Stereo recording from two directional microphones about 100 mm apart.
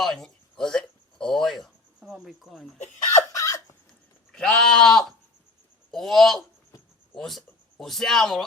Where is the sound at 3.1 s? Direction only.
30° left (ahead or behind).